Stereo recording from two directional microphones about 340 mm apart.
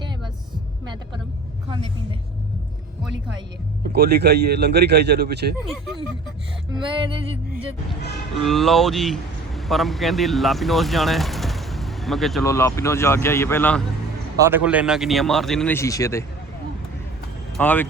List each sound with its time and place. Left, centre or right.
1.7 s a woman's voice: centre
3.8 s a man's voice: right
5.5 s speech: centre
6.7 s a woman's voice: centre
8.4 s speech: centre
14.3 s speech: centre
17.6 s speech: centre